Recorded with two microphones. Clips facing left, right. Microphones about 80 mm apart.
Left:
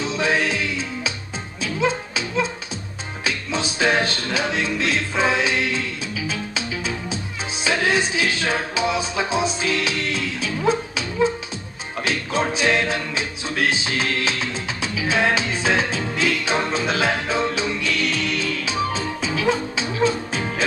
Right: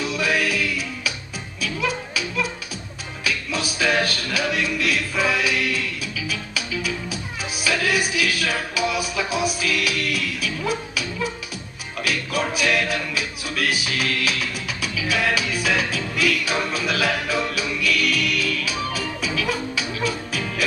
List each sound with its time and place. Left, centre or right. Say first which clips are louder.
0.0 s music: left 1 dB; left